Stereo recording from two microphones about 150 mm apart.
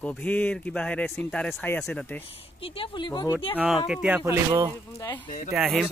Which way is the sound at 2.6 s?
35° left (ahead or behind).